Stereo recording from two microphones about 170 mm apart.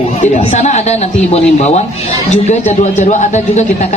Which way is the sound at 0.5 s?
40° left (ahead or behind).